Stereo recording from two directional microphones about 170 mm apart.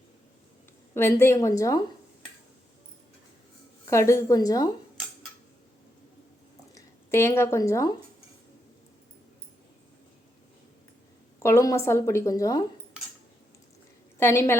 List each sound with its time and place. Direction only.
0.9 s a woman's voice: 15° left (ahead or behind)
3.8 s a woman's voice: 15° left (ahead or behind)
6.7 s a woman's voice: 15° left (ahead or behind)
11.4 s a woman's voice: 15° left (ahead or behind)
14.2 s a woman's voice: 15° left (ahead or behind)